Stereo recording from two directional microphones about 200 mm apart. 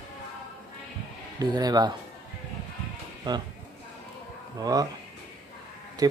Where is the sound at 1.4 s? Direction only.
20° right (ahead or behind).